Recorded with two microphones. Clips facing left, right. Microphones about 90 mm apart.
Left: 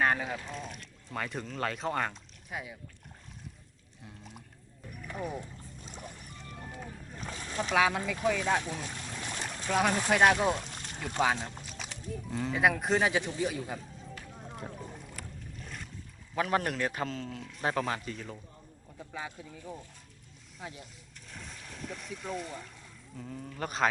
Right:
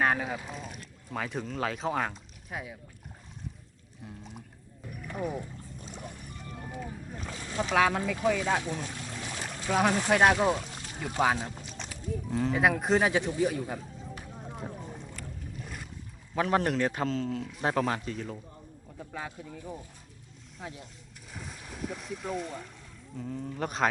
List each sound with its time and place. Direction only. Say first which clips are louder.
0.0 s speech: right 1 dB; centre (ahead or behind)
4.0 s music: right 4 dB; centre (ahead or behind)
5.0 s boat: right 3 dB; 5° right (ahead or behind)
6.0 s music: right 1 dB; 5° right (ahead or behind)
6.8 s boat: right 3 dB; 15° right (ahead or behind)
7.7 s speech: right 2 dB; centre (ahead or behind)
8.2 s speech: right 1 dB; 10° right (ahead or behind)
8.8 s boat: right 2 dB; 10° right (ahead or behind)
9.7 s speech: right 2 dB; centre (ahead or behind)
10.9 s a sound: right 2 dB; 5° right (ahead or behind)
12.1 s speech: right 5 dB; centre (ahead or behind)
13.7 s run: right 3 dB; 15° right (ahead or behind)
14.3 s boat: right 2 dB; 5° right (ahead or behind)
16.3 s speech: right 3 dB; centre (ahead or behind)